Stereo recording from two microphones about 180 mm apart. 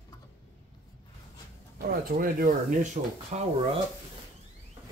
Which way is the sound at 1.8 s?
50° right (ahead or behind).